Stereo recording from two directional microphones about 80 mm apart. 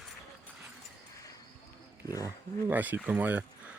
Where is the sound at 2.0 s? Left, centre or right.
Left.